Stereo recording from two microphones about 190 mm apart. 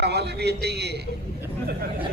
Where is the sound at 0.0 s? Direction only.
60° right (ahead or behind).